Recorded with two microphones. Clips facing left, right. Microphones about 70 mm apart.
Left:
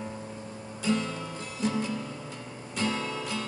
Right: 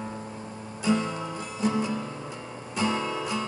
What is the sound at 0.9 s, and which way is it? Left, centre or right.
Music, right.